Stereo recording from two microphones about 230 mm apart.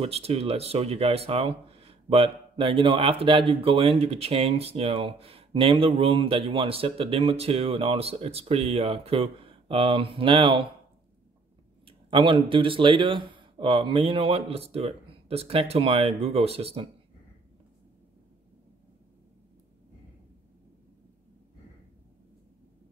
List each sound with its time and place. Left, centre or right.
0.0 s speech: right
11.8 s speech: right